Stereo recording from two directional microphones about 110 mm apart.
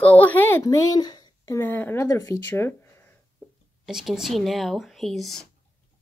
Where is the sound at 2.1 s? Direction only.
30° left (ahead or behind).